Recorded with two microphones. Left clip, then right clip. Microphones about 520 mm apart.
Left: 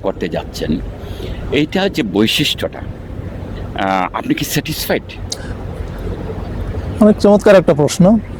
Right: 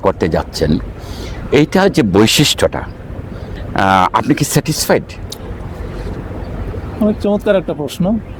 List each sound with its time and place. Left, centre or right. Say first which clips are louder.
0.0 s speech: right 5 dB; right
3.8 s speech: right 6 dB; right
7.0 s speech: left 6 dB; left